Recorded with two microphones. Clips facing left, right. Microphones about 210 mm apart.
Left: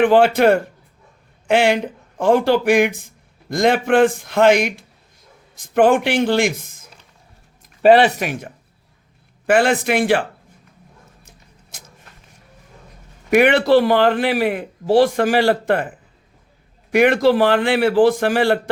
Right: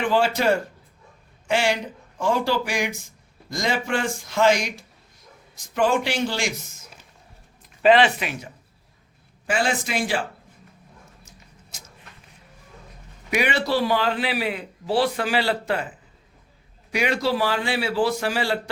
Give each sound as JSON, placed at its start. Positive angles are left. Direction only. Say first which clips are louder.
{"t": 0.0, "sound": "a man's voice", "louder": "left 8 dB", "side_deg": 60}
{"t": 7.8, "sound": "a man's voice", "louder": "left 5 dB", "side_deg": 40}
{"t": 11.3, "sound": "a sound", "louder": "left 1 dB", "side_deg": 50}
{"t": 13.3, "sound": "a man's voice", "louder": "left 10 dB", "side_deg": 60}
{"t": 16.9, "sound": "a man's voice", "louder": "left 9 dB", "side_deg": 55}